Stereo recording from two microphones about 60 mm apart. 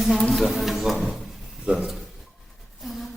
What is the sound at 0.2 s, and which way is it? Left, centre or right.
Speech, centre.